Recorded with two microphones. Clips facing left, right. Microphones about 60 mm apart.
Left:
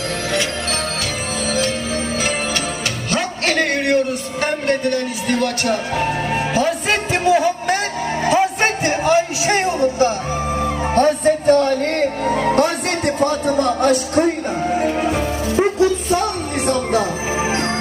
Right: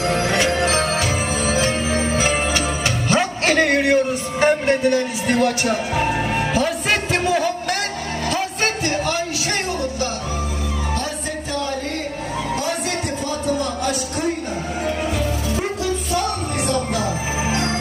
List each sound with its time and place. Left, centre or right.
0.1 s music: right
3.1 s a sound: centre
4.4 s music: centre
8.2 s a sound: centre
10.9 s music: left
14.8 s music: left